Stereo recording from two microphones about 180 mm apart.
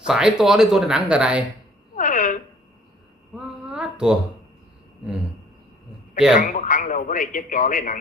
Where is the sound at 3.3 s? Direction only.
5° right (ahead or behind).